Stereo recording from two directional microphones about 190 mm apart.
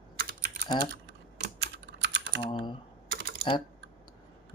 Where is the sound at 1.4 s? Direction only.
65° right (ahead or behind).